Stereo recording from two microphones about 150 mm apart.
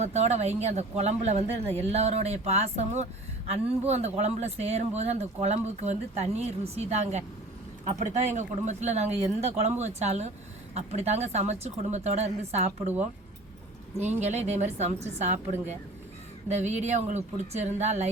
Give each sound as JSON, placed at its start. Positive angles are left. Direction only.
{"t": 0.0, "sound": "speech", "side_deg": -45}
{"t": 14.0, "sound": "speech", "side_deg": -50}